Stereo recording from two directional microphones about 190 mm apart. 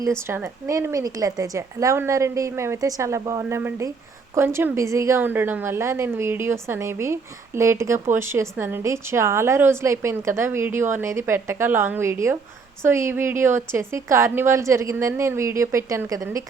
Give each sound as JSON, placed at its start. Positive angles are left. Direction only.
{"t": 0.0, "sound": "a woman's voice", "side_deg": -15}